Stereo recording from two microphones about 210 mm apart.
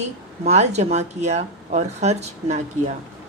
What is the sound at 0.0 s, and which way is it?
A woman's voice, 30° right (ahead or behind).